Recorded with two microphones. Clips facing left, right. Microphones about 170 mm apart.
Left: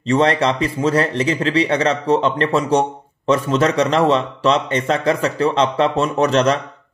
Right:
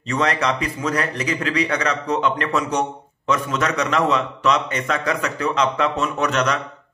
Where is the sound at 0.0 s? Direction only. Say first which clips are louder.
Left 6 dB; 30° left (ahead or behind).